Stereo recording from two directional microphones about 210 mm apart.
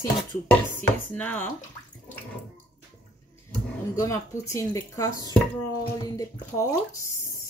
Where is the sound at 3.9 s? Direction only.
15° left (ahead or behind).